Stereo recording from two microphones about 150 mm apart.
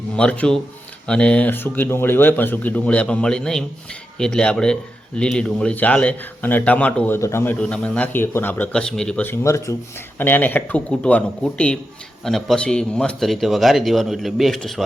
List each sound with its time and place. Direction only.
0.2 s a man's voice: 5° left (ahead or behind)
7.6 s a man's voice: 5° left (ahead or behind)